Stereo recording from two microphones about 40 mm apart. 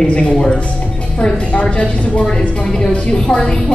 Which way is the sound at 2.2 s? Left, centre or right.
Centre.